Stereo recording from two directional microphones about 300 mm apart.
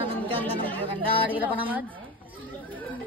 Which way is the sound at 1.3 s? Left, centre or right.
Centre.